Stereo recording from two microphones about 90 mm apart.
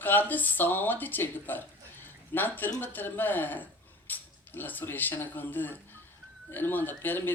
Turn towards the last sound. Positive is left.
turn(degrees=20)  # may be behind; listen again after turning